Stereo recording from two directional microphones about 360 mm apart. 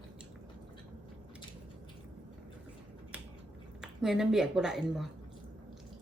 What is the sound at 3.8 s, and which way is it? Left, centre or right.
Speech, centre.